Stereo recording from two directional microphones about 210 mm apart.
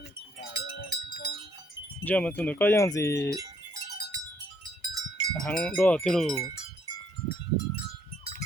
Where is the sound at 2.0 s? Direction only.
5° left (ahead or behind).